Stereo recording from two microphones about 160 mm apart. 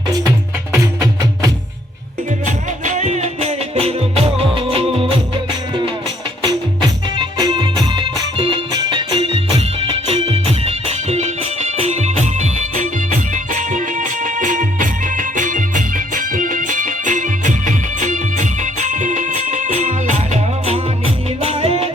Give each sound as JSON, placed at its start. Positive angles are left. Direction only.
{"t": 2.8, "sound": "music", "side_deg": -50}
{"t": 6.8, "sound": "music", "side_deg": -25}